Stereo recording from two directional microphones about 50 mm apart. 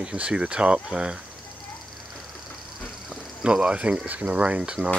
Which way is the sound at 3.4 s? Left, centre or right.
Centre.